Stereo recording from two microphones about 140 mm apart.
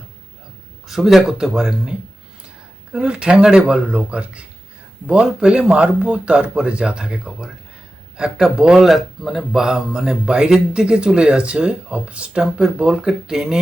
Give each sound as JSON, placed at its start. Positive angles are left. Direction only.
{"t": 0.9, "sound": "speech", "side_deg": -5}